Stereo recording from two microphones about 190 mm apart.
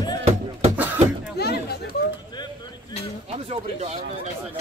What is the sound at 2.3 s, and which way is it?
Vehicle, 20° left (ahead or behind).